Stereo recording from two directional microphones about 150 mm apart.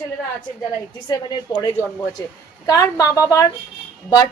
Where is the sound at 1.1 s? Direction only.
25° left (ahead or behind).